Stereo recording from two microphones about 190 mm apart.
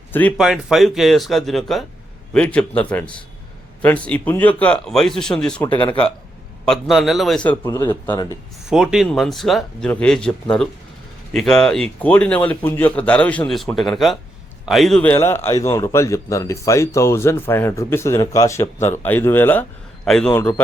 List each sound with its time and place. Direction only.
0.1 s speech: 10° left (ahead or behind)
0.3 s a man's voice: 5° right (ahead or behind)
5.6 s speech: 25° left (ahead or behind)
6.7 s speech: centre (ahead or behind)
7.6 s a man's voice: 15° left (ahead or behind)
8.7 s speech: 5° right (ahead or behind)
11.3 s a man's voice: centre (ahead or behind)